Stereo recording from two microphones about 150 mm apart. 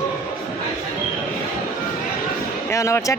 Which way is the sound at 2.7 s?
20° left (ahead or behind).